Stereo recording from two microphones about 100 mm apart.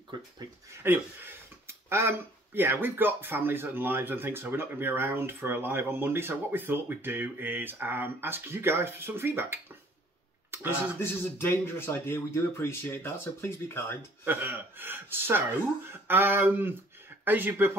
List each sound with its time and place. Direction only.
0.8 s speech: 20° right (ahead or behind)
11.0 s speech: 25° left (ahead or behind)
14.2 s speech: 20° right (ahead or behind)